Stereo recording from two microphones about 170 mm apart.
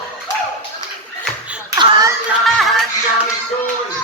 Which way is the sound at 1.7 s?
20° right (ahead or behind).